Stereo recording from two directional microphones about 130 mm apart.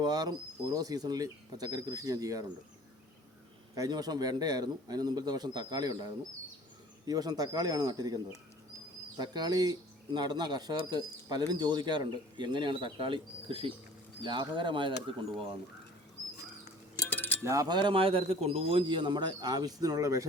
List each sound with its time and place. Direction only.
0.0 s speech: 30° right (ahead or behind)
3.8 s speech: 30° right (ahead or behind)
17.0 s a sound: 15° left (ahead or behind)
17.4 s speech: 25° right (ahead or behind)